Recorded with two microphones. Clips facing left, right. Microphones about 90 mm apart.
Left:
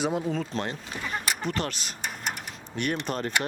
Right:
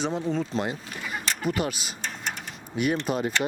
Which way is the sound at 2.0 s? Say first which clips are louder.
Left 2 dB; 10° left (ahead or behind).